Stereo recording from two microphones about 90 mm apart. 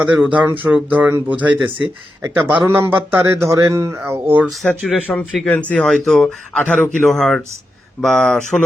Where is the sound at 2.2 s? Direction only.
30° right (ahead or behind).